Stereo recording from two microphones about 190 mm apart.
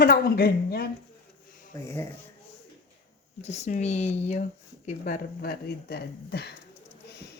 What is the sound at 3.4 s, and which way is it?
Speech, 35° left (ahead or behind).